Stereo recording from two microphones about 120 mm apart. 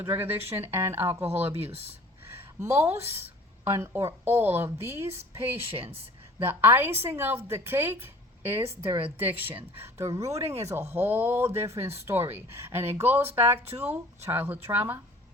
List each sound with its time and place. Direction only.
0.0 s speech: 15° right (ahead or behind)
1.5 s speech: 55° right (ahead or behind)
2.3 s a woman's voice: 25° right (ahead or behind)
5.7 s speech: 55° right (ahead or behind)
6.5 s speech: 15° right (ahead or behind)
8.9 s speech: 50° right (ahead or behind)
9.2 s speech: 15° right (ahead or behind)